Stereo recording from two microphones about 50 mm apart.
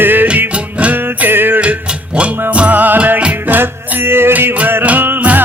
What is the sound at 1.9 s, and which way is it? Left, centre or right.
Music, right.